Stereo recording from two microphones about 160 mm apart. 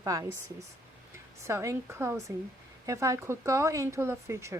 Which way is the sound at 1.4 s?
20° right (ahead or behind).